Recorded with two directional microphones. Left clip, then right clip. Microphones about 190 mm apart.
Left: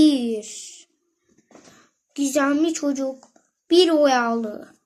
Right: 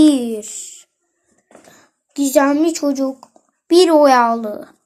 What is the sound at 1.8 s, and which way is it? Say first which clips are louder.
A child's voice: right 5 dB; 15° right (ahead or behind).